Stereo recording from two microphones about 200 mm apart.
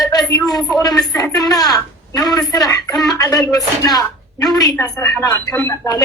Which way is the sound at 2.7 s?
20° left (ahead or behind).